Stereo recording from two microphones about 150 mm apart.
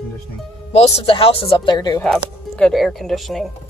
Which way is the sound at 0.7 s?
45° left (ahead or behind).